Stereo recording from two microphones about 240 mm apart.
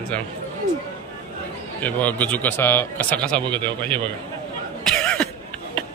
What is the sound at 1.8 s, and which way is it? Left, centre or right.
A man's voice, centre.